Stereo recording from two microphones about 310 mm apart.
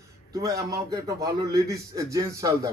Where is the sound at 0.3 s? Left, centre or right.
Centre.